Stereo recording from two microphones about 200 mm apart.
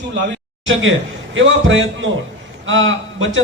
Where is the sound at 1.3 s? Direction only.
70° right (ahead or behind).